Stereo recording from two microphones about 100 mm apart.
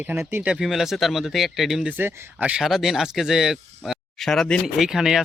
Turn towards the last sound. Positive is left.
turn(degrees=-5)  # may be behind; listen again after turning